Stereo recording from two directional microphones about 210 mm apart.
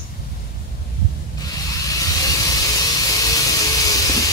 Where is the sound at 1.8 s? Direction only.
15° left (ahead or behind).